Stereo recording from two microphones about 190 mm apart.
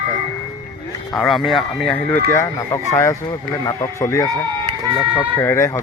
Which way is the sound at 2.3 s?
15° left (ahead or behind).